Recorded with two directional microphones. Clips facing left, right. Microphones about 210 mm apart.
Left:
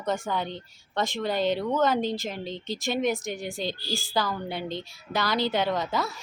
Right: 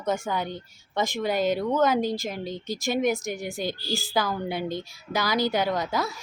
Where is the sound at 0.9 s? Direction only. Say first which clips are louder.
Right 2 dB; 15° right (ahead or behind).